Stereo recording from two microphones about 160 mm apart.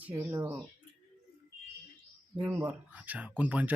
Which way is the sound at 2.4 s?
10° right (ahead or behind).